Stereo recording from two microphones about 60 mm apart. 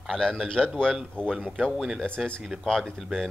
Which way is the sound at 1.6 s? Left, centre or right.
Centre.